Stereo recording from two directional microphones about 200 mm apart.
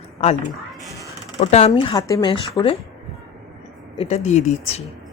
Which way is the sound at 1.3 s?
30° left (ahead or behind).